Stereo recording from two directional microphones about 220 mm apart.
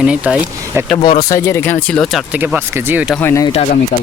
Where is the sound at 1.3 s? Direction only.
10° left (ahead or behind).